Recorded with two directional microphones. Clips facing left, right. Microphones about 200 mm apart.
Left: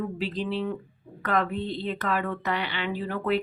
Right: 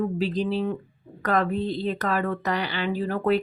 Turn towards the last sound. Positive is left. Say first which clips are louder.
# right 4 dB
turn(degrees=-40)  # may be behind; listen again after turning